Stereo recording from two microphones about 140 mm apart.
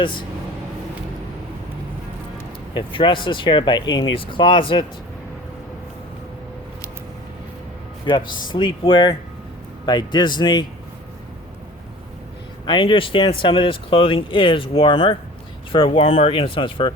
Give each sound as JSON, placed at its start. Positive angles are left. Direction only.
{"t": 0.0, "sound": "speech", "side_deg": 35}
{"t": 2.7, "sound": "speech", "side_deg": 35}
{"t": 8.0, "sound": "speech", "side_deg": 35}
{"t": 12.6, "sound": "speech", "side_deg": 35}